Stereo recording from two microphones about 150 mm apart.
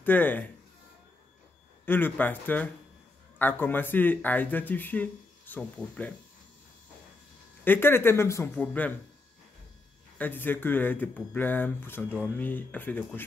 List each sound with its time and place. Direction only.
0.0 s speech: 10° left (ahead or behind)
1.9 s speech: 15° left (ahead or behind)
7.6 s speech: 15° left (ahead or behind)
10.1 s speech: 10° left (ahead or behind)